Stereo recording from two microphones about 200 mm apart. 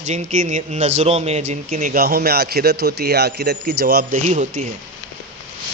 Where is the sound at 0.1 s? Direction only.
35° right (ahead or behind); by 4.2 s 50° right (ahead or behind).